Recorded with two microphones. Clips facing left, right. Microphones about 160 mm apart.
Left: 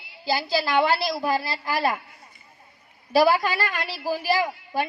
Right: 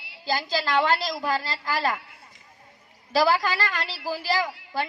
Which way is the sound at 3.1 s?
15° left (ahead or behind).